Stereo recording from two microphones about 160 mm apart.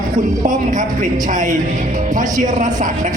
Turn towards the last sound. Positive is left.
turn(degrees=-50)  # may be behind; listen again after turning